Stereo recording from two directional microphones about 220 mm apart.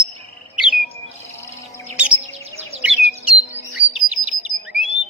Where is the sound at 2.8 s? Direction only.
5° right (ahead or behind).